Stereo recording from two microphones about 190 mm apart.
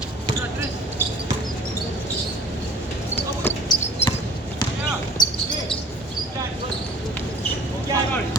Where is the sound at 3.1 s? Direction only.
10° left (ahead or behind).